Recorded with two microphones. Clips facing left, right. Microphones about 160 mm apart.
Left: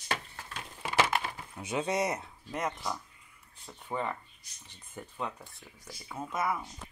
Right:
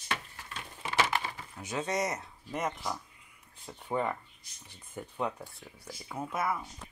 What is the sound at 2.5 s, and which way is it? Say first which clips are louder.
Speech: even; 5° right (ahead or behind).